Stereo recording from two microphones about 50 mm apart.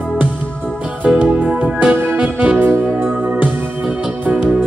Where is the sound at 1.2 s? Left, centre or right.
Right.